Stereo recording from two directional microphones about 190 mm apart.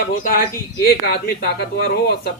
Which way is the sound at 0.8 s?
55° left (ahead or behind).